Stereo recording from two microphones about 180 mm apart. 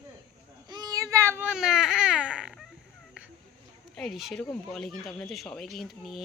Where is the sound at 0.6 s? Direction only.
20° right (ahead or behind).